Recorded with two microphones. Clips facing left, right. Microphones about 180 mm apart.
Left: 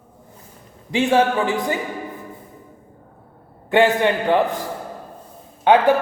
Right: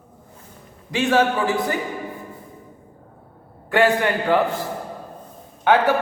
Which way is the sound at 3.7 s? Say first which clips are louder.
Left 2 dB; 20° left (ahead or behind).